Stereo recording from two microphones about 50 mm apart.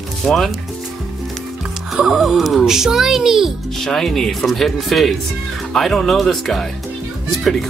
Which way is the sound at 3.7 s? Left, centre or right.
Centre.